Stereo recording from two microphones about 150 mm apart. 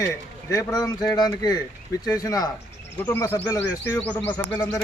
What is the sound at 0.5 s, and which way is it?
Speech, 25° left (ahead or behind).